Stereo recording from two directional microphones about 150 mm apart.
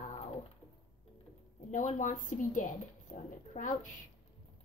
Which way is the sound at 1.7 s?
55° left (ahead or behind).